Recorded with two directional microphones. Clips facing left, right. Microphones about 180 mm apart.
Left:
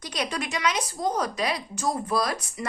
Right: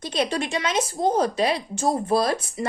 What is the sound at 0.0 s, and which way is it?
Speech, 25° right (ahead or behind).